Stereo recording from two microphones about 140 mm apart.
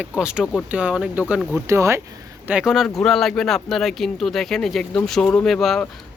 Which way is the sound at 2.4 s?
5° right (ahead or behind).